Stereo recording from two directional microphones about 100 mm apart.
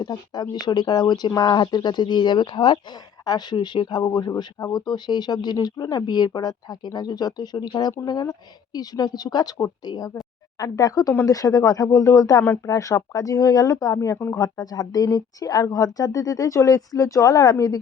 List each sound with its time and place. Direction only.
0.0 s speech: 45° left (ahead or behind)
4.0 s speech: 35° left (ahead or behind)
12.4 s speech: 20° left (ahead or behind)
12.7 s speech: 35° left (ahead or behind)